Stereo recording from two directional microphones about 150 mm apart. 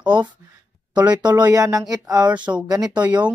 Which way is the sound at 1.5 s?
20° right (ahead or behind).